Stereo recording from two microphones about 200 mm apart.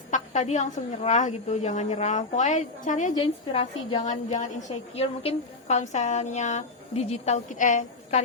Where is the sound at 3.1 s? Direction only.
25° left (ahead or behind).